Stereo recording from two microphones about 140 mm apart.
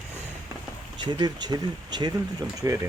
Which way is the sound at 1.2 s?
30° right (ahead or behind).